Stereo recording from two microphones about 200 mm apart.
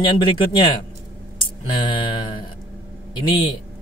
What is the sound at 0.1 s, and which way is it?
Speech, 25° left (ahead or behind).